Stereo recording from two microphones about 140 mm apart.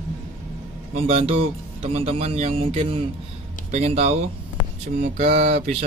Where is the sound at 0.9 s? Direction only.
45° right (ahead or behind).